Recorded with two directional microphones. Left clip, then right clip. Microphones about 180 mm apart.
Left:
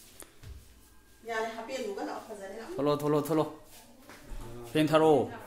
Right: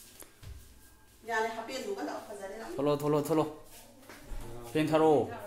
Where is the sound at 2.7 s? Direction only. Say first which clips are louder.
Left 1 dB; 10° left (ahead or behind).